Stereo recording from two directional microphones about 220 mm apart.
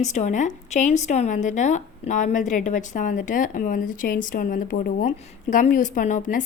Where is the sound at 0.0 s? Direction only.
30° left (ahead or behind).